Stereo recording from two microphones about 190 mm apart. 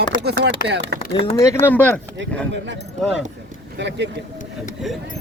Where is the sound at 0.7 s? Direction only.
65° right (ahead or behind).